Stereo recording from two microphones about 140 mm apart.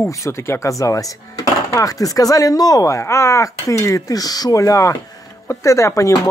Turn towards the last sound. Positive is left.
turn(degrees=25)  # may be behind; listen again after turning